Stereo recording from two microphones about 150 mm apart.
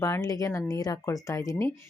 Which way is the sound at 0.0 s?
20° left (ahead or behind).